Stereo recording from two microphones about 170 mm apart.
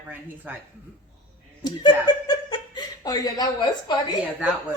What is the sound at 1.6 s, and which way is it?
Speech, 25° left (ahead or behind).